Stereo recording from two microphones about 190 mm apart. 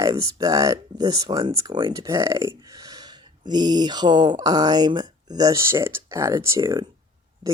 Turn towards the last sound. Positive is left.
turn(degrees=-15)  # may be behind; listen again after turning